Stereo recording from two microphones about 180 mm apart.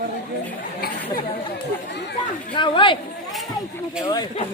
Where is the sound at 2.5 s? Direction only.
30° left (ahead or behind).